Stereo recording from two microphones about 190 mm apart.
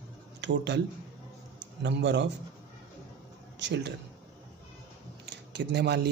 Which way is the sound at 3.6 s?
65° right (ahead or behind).